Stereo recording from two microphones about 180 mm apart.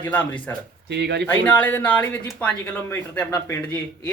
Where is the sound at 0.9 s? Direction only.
70° right (ahead or behind).